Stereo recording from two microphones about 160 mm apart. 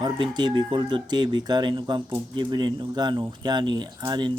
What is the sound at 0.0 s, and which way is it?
Speech, 25° right (ahead or behind).